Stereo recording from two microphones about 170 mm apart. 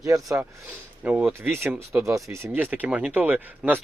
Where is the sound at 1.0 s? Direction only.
10° right (ahead or behind).